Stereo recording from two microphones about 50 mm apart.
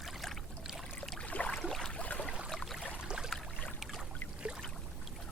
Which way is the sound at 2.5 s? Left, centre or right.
Centre.